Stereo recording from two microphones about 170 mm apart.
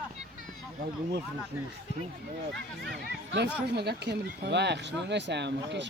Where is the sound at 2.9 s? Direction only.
80° right.